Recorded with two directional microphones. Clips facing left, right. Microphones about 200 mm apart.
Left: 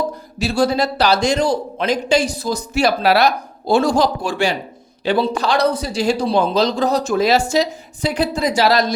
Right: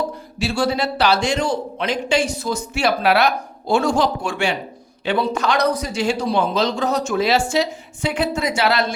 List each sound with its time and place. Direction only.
0.3 s a man's voice: 40° left (ahead or behind)